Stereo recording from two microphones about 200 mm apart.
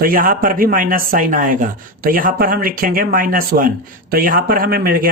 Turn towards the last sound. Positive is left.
turn(degrees=-45)  # may be behind; listen again after turning